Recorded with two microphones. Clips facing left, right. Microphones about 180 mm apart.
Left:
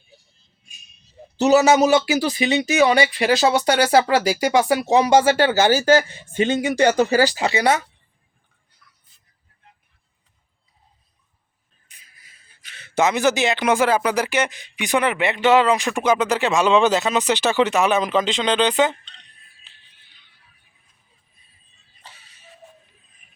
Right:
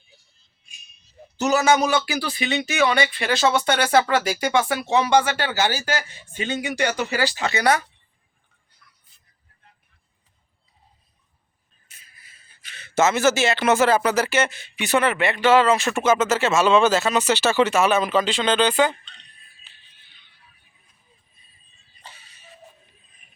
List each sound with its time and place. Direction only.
1.4 s speech: 35° left (ahead or behind)
2.9 s speech: 20° left (ahead or behind)
3.3 s speech: 35° left (ahead or behind); by 5.0 s 20° left (ahead or behind)
5.0 s speech: 40° left (ahead or behind); by 7.9 s 25° left (ahead or behind)
11.9 s a sound: 15° left (ahead or behind)
12.6 s speech: 10° left (ahead or behind)
22.0 s a sound: centre (ahead or behind)